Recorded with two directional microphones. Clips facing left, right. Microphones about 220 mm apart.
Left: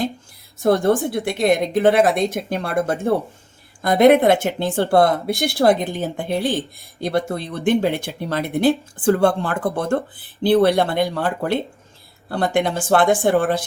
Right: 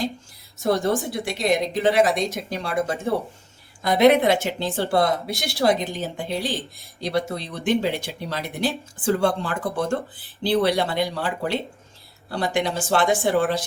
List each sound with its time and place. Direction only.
0.6 s speech: 50° left (ahead or behind)